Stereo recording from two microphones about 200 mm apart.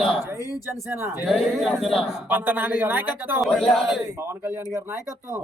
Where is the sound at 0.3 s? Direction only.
15° left (ahead or behind).